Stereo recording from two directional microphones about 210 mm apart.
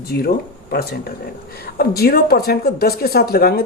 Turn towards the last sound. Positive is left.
turn(degrees=50)  # may be behind; listen again after turning